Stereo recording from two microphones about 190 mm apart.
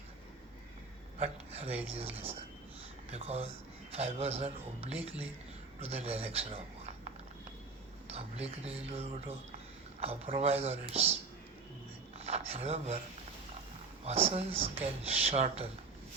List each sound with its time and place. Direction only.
1.2 s speech: 30° right (ahead or behind)
12.1 s a sound: 30° right (ahead or behind)
14.0 s speech: 30° right (ahead or behind)